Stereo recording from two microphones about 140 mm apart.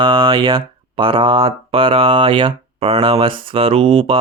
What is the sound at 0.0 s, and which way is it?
Speech, 35° right (ahead or behind).